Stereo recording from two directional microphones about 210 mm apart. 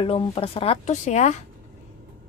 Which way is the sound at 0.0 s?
25° left (ahead or behind).